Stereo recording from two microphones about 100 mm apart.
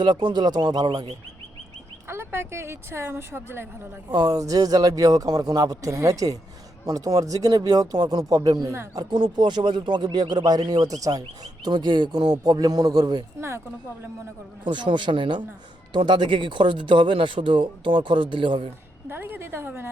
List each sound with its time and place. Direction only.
0.0 s speech: 45° right (ahead or behind)
2.0 s speech: 25° right (ahead or behind)
4.1 s speech: 50° right (ahead or behind)
4.4 s speech: 35° right (ahead or behind)
9.0 s speech: 50° right (ahead or behind)
14.6 s speech: 50° right (ahead or behind)
19.0 s speech: 20° right (ahead or behind)